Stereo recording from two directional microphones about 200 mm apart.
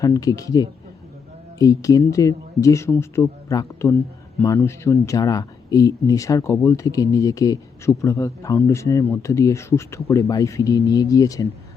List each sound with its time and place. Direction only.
0.0 s speech: 20° left (ahead or behind)